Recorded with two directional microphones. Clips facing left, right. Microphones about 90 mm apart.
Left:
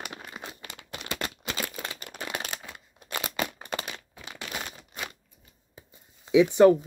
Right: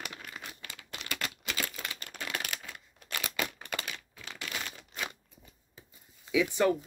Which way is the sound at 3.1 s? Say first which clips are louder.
Left 4 dB; 30° left (ahead or behind).